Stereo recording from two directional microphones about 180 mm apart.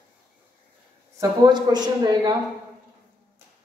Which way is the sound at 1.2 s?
25° right (ahead or behind).